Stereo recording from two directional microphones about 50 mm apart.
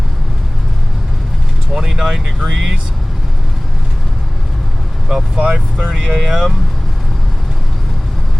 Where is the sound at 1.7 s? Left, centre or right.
Centre.